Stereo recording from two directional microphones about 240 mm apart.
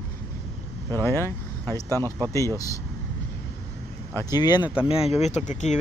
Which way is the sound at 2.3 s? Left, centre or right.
Centre.